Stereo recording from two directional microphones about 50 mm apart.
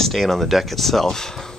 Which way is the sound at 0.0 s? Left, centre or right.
Centre.